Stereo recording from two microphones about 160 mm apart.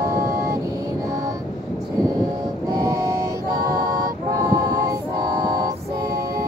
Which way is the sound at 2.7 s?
20° right (ahead or behind).